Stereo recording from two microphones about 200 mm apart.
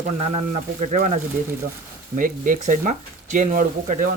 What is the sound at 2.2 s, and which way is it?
Speech, 40° right (ahead or behind).